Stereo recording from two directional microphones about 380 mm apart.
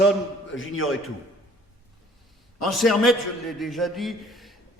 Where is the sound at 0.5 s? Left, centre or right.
Left.